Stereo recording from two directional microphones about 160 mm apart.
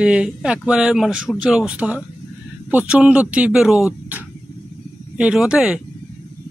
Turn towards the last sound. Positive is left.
turn(degrees=-5)  # may be behind; listen again after turning